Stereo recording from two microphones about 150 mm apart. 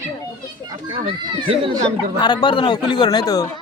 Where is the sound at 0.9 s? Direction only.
35° right (ahead or behind).